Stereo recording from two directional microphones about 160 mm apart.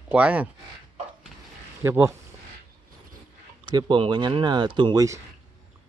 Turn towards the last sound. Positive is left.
turn(degrees=-25)  # may be behind; listen again after turning